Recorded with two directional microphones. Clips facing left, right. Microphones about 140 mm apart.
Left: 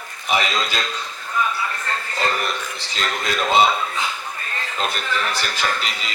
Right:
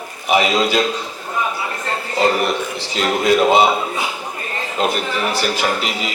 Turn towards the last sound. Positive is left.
turn(degrees=-10)  # may be behind; listen again after turning